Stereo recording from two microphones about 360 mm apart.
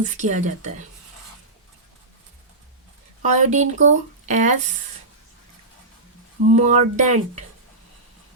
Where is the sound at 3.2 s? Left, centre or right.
Centre.